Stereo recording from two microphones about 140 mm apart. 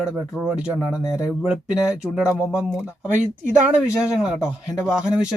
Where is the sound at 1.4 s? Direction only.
5° right (ahead or behind).